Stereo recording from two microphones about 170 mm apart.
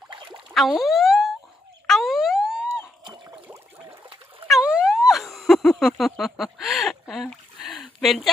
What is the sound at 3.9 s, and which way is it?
Splash, 30° right (ahead or behind).